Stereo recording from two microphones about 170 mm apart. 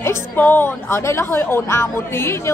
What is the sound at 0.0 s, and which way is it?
A woman's voice, 15° left (ahead or behind).